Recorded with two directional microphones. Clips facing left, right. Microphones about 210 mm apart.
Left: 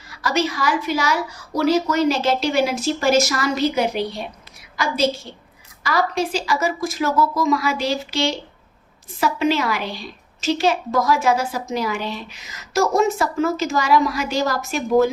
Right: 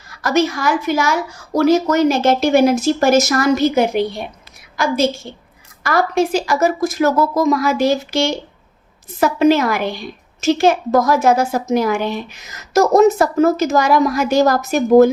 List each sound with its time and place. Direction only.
0.1 s a woman's voice: 45° right (ahead or behind)